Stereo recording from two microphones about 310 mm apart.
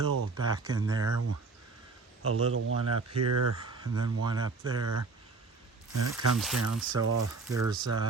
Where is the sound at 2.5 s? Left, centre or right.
Right.